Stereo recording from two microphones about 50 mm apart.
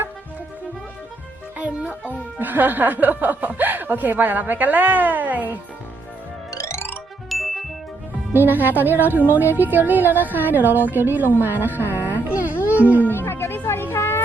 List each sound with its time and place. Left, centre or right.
1.5 s a child's voice: right
6.7 s music: left
7.3 s ding: centre
8.3 s a woman's voice: right
11.9 s music: right
12.5 s music: left
12.8 s a woman's voice: right
13.2 s music: left
13.7 s a sound: left